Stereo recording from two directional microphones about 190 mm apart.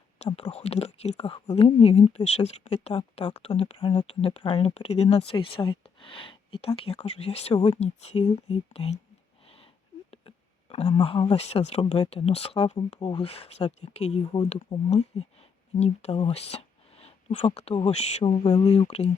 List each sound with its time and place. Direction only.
0.3 s speech: 25° left (ahead or behind)
0.5 s speech: 35° left (ahead or behind)
3.0 s speech: 25° left (ahead or behind)
10.1 s a sound: 30° left (ahead or behind)
10.8 s speech: 25° left (ahead or behind)